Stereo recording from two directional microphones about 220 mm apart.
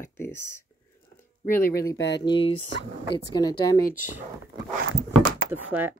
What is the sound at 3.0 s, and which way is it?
Speech, 50° left (ahead or behind).